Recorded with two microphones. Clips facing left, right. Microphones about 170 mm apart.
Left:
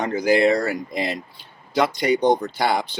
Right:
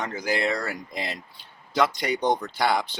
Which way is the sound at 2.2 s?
30° left (ahead or behind).